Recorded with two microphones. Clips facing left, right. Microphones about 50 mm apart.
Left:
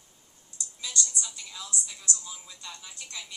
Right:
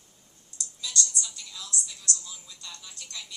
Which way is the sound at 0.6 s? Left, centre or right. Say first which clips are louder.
Right 2 dB; centre.